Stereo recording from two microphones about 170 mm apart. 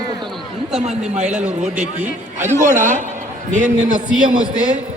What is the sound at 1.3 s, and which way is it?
Speech, 10° right (ahead or behind).